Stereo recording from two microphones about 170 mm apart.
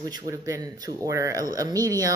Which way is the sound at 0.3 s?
20° right (ahead or behind).